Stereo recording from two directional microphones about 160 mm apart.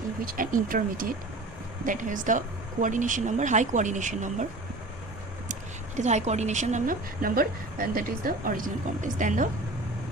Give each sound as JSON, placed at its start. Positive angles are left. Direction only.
{"t": 0.3, "sound": "a woman's voice", "side_deg": -60}
{"t": 6.0, "sound": "a woman's voice", "side_deg": -45}